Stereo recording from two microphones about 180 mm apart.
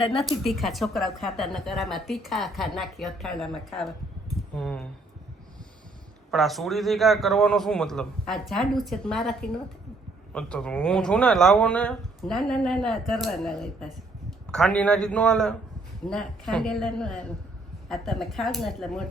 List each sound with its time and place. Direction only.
0.0 s a woman's voice: 30° left (ahead or behind)
0.4 s speech: centre (ahead or behind)
6.3 s speech: centre (ahead or behind)